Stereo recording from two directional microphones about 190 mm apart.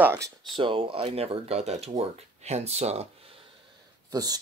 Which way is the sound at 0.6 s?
25° right (ahead or behind).